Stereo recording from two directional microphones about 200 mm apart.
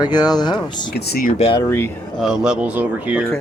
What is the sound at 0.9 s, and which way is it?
Speech, 50° left (ahead or behind).